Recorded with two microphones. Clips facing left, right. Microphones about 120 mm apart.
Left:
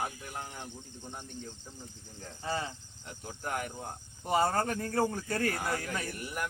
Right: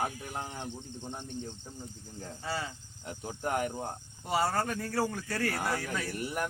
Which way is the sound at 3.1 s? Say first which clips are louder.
Right 4 dB; 35° right (ahead or behind).